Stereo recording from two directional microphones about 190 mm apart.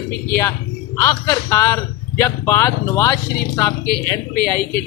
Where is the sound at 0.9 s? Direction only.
15° left (ahead or behind).